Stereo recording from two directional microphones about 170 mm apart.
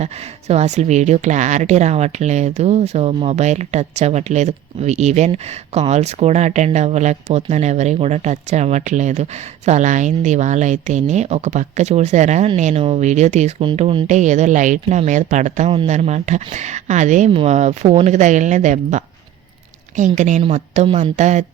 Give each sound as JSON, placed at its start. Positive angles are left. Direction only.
{"t": 0.0, "sound": "speech", "side_deg": -40}